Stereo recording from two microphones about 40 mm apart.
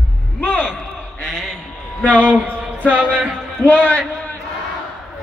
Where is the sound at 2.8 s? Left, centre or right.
Right.